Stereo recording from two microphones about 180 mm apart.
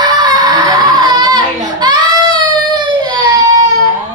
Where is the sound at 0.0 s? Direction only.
25° right (ahead or behind).